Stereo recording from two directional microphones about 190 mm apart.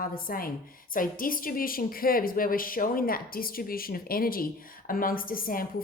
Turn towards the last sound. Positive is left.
turn(degrees=50)  # may be behind; listen again after turning